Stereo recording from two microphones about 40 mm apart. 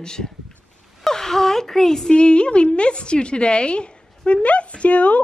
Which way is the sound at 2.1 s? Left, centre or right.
Left.